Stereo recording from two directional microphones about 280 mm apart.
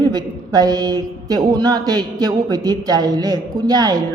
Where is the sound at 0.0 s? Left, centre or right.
Centre.